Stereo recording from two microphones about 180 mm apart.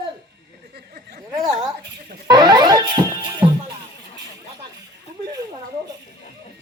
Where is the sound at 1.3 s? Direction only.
20° right (ahead or behind).